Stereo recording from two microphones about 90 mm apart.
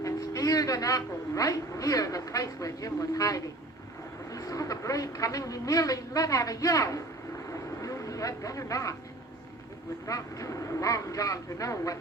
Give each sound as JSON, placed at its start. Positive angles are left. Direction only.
{"t": 0.0, "sound": "a man's voice", "side_deg": 40}
{"t": 7.5, "sound": "vehicle", "side_deg": 35}
{"t": 10.1, "sound": "a woman's voice", "side_deg": 40}